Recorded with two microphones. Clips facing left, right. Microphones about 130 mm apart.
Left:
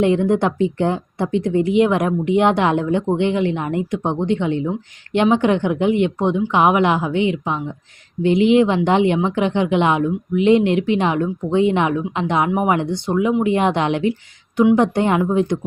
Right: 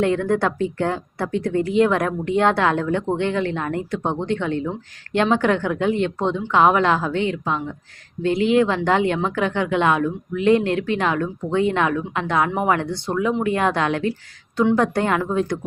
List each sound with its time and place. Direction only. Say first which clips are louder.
0.0 s a woman's voice: left 3 dB; 20° left (ahead or behind)